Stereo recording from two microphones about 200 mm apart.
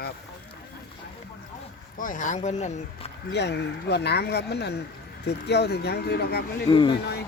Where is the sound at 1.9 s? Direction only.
40° left (ahead or behind).